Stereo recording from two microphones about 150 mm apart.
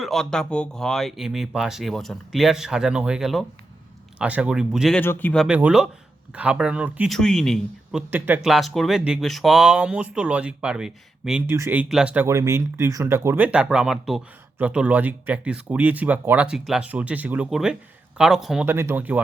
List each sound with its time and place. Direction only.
0.0 s speech: centre (ahead or behind)
4.9 s a man's voice: 10° left (ahead or behind)
5.5 s speech: 10° right (ahead or behind)
7.1 s speech: 5° left (ahead or behind)
8.1 s speech: 10° right (ahead or behind)
11.4 s speech: 20° right (ahead or behind)
11.9 s speech: 5° right (ahead or behind)
18.6 s speech: 15° right (ahead or behind)